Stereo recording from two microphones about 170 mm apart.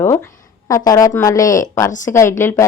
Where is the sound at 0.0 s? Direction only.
15° left (ahead or behind).